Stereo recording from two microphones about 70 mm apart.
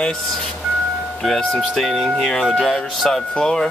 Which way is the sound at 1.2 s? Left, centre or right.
Centre.